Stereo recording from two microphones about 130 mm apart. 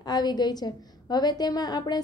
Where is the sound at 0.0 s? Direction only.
30° left (ahead or behind).